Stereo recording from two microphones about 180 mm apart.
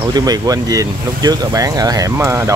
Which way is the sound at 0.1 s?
20° right (ahead or behind).